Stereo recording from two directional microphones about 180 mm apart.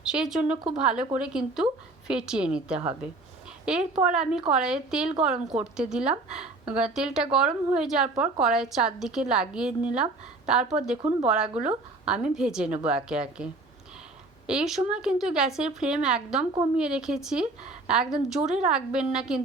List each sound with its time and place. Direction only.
0.0 s a woman's voice: 5° right (ahead or behind)